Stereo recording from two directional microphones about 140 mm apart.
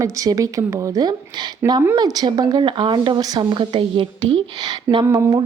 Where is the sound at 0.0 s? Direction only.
25° right (ahead or behind).